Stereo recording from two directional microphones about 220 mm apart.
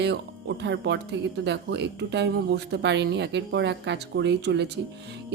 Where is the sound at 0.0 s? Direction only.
50° right (ahead or behind).